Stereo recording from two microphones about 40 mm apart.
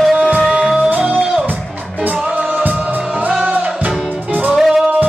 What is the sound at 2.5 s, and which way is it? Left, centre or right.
Music, right.